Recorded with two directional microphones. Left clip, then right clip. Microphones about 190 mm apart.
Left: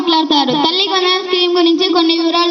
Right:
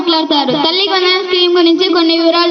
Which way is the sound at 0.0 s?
45° left (ahead or behind).